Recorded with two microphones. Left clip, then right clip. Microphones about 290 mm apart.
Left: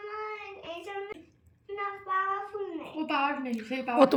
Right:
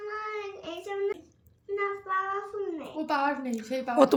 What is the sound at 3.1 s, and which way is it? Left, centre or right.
Speech, right.